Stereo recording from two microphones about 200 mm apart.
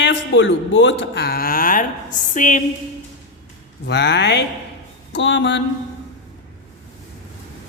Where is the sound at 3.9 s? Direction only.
55° left (ahead or behind).